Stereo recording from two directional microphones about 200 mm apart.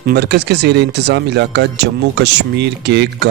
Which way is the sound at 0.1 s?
55° right (ahead or behind).